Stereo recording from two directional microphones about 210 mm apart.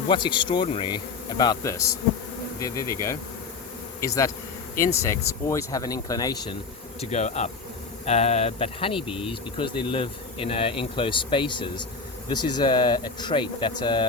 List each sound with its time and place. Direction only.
0.1 s speech: 20° left (ahead or behind)
7.0 s speech: 30° left (ahead or behind)